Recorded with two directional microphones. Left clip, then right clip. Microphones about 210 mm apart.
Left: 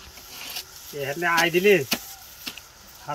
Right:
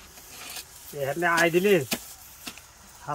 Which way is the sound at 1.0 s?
25° right (ahead or behind).